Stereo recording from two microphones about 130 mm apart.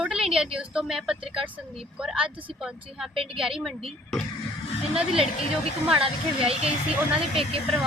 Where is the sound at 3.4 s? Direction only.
5° right (ahead or behind).